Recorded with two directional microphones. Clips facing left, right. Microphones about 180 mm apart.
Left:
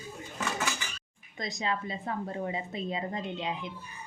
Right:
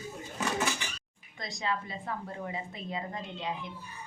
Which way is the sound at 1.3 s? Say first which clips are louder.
Left 2 dB; 20° left (ahead or behind).